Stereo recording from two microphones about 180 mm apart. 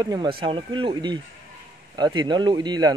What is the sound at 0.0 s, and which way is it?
A man's voice, 25° right (ahead or behind).